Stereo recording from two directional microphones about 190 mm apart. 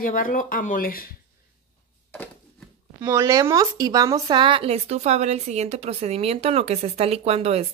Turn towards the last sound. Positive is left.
turn(degrees=-30)  # may be behind; listen again after turning